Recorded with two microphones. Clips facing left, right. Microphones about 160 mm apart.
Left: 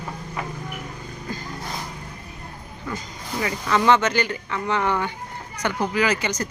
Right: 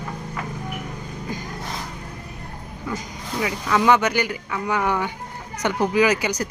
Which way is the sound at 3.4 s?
5° right (ahead or behind).